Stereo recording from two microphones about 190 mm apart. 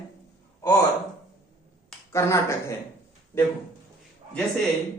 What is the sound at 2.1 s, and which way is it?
Speech, 15° left (ahead or behind).